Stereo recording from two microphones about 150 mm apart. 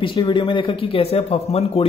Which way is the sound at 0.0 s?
35° left (ahead or behind).